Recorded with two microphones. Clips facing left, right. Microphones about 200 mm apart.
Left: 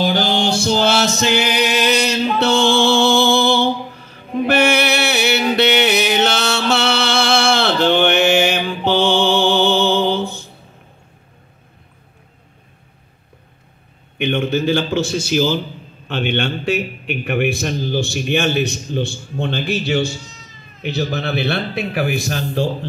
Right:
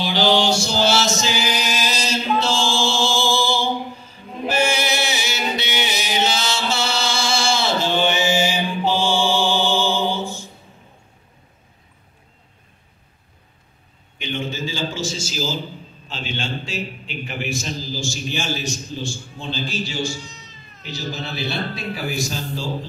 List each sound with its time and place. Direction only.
0.0 s music: 50° left (ahead or behind)
14.1 s a sound: 60° left (ahead or behind)
16.1 s a man's voice: 60° left (ahead or behind)